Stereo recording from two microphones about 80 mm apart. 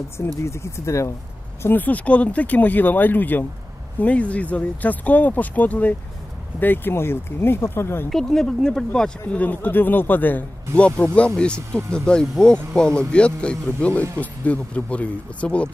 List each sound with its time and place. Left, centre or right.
0.4 s speech: left
1.6 s speech: left
8.1 s speech: centre